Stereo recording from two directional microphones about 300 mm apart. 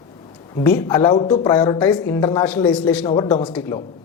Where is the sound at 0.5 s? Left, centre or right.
Centre.